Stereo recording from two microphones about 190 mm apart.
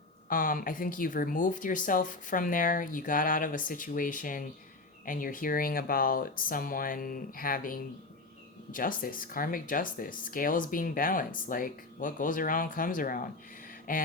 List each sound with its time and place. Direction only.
0.3 s speech: 45° left (ahead or behind)